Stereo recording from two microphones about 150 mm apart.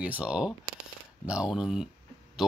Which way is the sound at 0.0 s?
10° right (ahead or behind).